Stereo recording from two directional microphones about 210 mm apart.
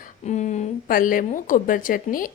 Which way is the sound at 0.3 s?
35° left (ahead or behind).